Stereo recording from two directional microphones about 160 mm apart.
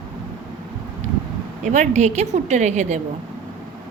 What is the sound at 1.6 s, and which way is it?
A woman's voice, 50° right (ahead or behind).